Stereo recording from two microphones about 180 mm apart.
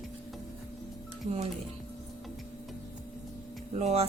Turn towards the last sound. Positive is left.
turn(degrees=-35)  # may be behind; listen again after turning